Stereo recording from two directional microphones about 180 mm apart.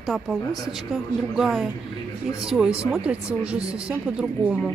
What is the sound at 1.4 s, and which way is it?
Speech, centre (ahead or behind).